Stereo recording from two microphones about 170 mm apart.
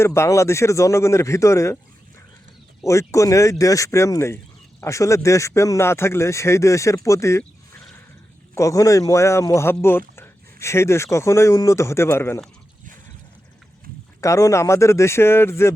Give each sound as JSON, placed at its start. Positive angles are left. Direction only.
{"t": 0.0, "sound": "speech", "side_deg": 15}
{"t": 2.8, "sound": "speech", "side_deg": 15}
{"t": 8.5, "sound": "speech", "side_deg": 20}
{"t": 14.2, "sound": "speech", "side_deg": 20}